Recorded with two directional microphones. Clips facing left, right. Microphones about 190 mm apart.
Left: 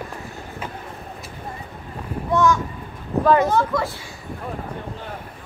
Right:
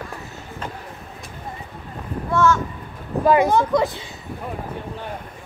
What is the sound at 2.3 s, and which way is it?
Speech, 15° left (ahead or behind).